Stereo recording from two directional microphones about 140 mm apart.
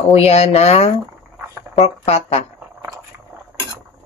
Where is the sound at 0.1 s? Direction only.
50° left (ahead or behind).